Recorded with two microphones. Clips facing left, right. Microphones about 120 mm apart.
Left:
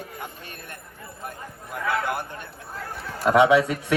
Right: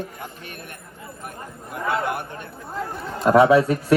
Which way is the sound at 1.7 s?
25° right (ahead or behind).